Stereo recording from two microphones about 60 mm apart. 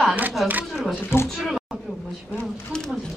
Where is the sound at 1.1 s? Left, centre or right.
Left.